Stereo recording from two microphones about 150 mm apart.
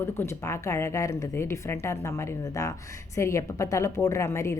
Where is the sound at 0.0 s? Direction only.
20° left (ahead or behind).